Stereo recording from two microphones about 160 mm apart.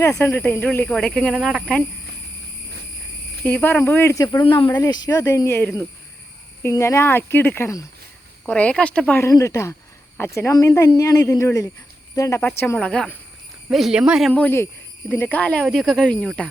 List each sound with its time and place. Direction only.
0.0 s speech: 15° left (ahead or behind); by 1.8 s centre (ahead or behind)
3.4 s speech: 10° left (ahead or behind)
14.4 s speech: 15° left (ahead or behind)